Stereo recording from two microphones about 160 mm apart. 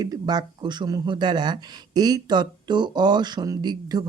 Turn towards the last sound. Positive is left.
turn(degrees=-25)  # may be behind; listen again after turning